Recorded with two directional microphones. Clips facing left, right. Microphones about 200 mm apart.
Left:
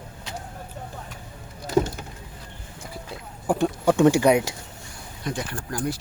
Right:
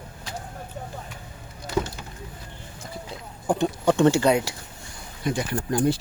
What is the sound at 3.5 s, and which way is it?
Speech, 10° left (ahead or behind).